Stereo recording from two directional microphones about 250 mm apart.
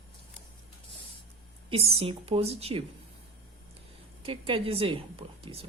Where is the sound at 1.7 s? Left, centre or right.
Right.